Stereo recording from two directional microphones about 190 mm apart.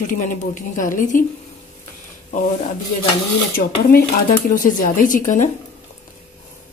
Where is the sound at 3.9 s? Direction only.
45° left (ahead or behind).